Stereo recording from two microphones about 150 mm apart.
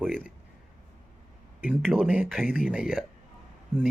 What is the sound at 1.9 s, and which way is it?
Speech, 10° right (ahead or behind).